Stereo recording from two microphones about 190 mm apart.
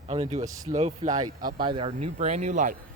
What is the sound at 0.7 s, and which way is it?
Speech, 35° right (ahead or behind).